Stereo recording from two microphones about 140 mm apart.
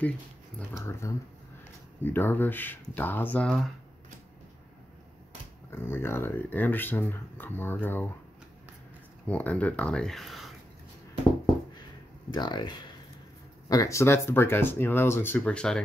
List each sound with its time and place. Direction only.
0.7 s speech: 20° left (ahead or behind); by 3.7 s 5° left (ahead or behind)
5.7 s speech: 15° left (ahead or behind)
9.3 s speech: 10° left (ahead or behind)
12.3 s speech: 30° left (ahead or behind); by 15.8 s 5° left (ahead or behind)